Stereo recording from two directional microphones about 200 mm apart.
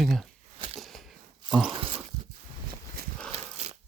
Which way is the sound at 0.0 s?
Centre (ahead or behind).